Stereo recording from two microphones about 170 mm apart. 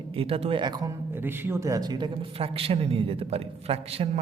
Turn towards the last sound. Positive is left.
turn(degrees=-35)  # may be behind; listen again after turning